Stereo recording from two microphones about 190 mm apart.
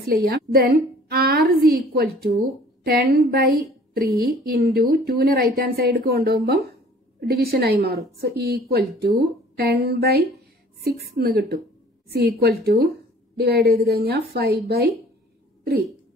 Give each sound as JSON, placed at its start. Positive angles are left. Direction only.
{"t": 0.0, "sound": "a woman's voice", "side_deg": -55}